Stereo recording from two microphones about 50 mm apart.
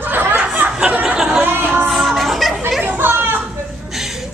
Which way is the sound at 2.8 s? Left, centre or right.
Right.